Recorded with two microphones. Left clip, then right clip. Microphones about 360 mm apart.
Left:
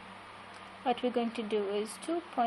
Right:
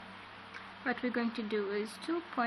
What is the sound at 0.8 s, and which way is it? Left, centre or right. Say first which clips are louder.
Speech: left 4 dB; centre.